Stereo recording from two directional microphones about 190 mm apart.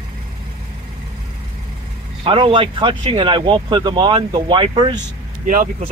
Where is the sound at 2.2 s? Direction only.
30° right (ahead or behind).